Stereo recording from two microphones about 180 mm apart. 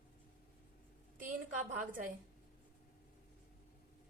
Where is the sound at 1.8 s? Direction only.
45° right (ahead or behind).